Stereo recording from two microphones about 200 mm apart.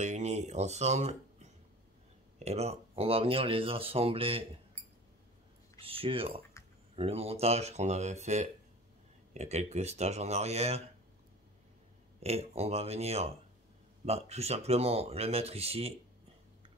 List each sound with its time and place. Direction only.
0.0 s speech: 35° right (ahead or behind)
5.8 s speech: 30° right (ahead or behind)
12.2 s speech: 30° right (ahead or behind)